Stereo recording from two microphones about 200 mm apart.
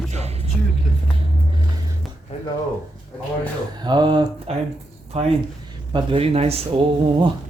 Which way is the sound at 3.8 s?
20° right (ahead or behind).